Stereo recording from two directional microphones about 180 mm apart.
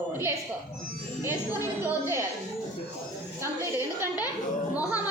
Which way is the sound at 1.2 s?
15° right (ahead or behind).